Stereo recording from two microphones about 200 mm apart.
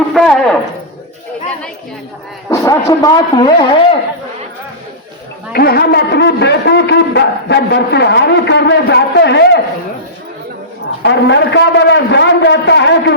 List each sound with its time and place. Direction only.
0.1 s a sound: centre (ahead or behind)
2.5 s speech: 15° left (ahead or behind)
5.5 s a man's voice: 50° left (ahead or behind)
11.0 s a man's voice: 60° left (ahead or behind)